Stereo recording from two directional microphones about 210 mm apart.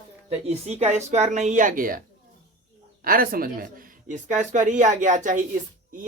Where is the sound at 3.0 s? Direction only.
45° right (ahead or behind).